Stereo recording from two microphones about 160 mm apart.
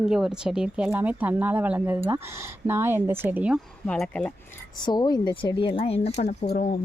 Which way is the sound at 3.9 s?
5° left (ahead or behind).